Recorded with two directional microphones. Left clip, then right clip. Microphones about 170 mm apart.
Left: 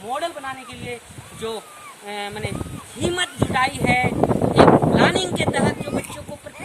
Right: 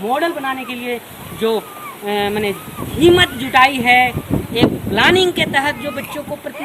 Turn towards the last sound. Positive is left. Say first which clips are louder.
# right 5 dB
turn(degrees=0)  # may be behind; listen again after turning